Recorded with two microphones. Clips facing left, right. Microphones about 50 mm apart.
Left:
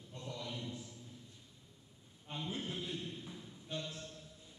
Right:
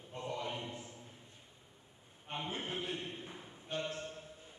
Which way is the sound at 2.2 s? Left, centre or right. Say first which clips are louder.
Right 2 dB; right.